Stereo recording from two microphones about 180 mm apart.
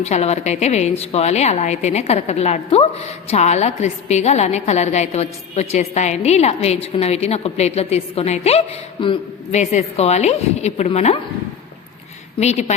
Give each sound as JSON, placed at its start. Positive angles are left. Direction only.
{"t": 0.0, "sound": "a woman's voice", "side_deg": 35}
{"t": 12.4, "sound": "a woman's voice", "side_deg": 40}